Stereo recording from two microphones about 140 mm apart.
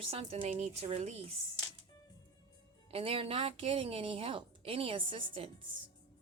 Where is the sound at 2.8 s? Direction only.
45° right (ahead or behind).